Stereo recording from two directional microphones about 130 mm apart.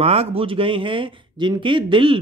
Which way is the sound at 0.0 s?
50° right (ahead or behind).